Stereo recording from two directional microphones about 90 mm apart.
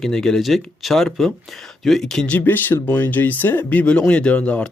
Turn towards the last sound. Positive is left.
turn(degrees=15)  # may be behind; listen again after turning